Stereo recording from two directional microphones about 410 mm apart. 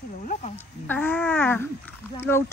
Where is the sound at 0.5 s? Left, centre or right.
Centre.